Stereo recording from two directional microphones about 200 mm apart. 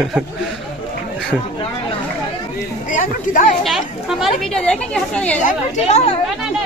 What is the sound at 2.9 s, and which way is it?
Speech, 40° left (ahead or behind).